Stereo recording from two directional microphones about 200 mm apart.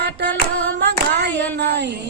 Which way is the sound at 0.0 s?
55° right (ahead or behind).